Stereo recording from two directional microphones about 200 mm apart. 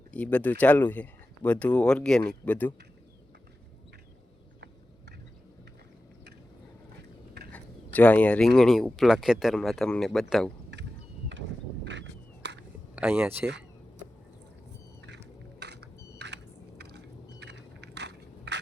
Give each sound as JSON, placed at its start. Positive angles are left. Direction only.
{"t": 0.1, "sound": "speech", "side_deg": 5}
{"t": 7.5, "sound": "speech", "side_deg": 5}
{"t": 11.9, "sound": "a sound", "side_deg": -60}
{"t": 13.0, "sound": "speech", "side_deg": -10}
{"t": 15.0, "sound": "a sound", "side_deg": -55}
{"t": 17.4, "sound": "biting", "side_deg": -60}